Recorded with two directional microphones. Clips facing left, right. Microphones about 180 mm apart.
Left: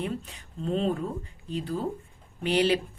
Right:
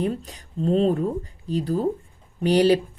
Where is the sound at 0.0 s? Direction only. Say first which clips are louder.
Right 6 dB; 40° right (ahead or behind).